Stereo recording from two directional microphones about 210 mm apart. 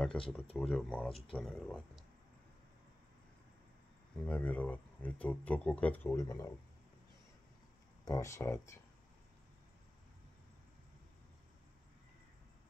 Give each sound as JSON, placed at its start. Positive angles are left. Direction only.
{"t": 0.0, "sound": "speech", "side_deg": 5}
{"t": 4.2, "sound": "speech", "side_deg": 5}
{"t": 8.0, "sound": "speech", "side_deg": 15}